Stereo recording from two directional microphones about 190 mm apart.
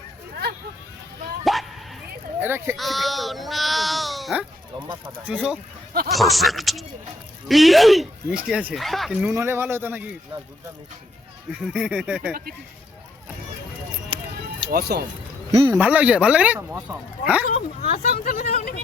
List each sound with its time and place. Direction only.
1.5 s bow-wow: centre (ahead or behind)
2.4 s speech: 10° right (ahead or behind)
2.7 s speech: centre (ahead or behind)
9.3 s speech: 15° right (ahead or behind)
11.6 s speech: 5° right (ahead or behind)
14.1 s run: 25° right (ahead or behind)
14.7 s speech: 55° right (ahead or behind)
15.7 s speech: 10° right (ahead or behind)
17.8 s speech: 55° left (ahead or behind)